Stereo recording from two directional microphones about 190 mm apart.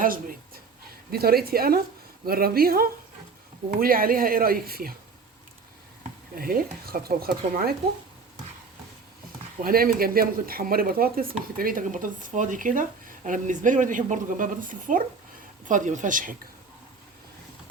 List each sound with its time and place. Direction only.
0.0 s speech: 50° right (ahead or behind)
6.0 s speech: 50° right (ahead or behind)
9.6 s speech: 50° right (ahead or behind)